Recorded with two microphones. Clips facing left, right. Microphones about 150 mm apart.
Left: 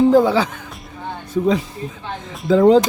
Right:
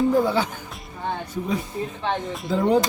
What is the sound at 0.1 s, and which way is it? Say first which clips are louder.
Speech: left 6 dB; 90° left.